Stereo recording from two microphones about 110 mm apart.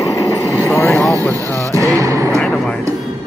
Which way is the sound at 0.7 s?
25° left (ahead or behind).